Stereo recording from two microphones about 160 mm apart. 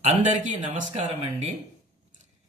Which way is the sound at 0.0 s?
50° right (ahead or behind).